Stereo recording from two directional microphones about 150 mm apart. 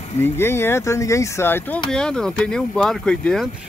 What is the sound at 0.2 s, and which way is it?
Speech, 15° left (ahead or behind).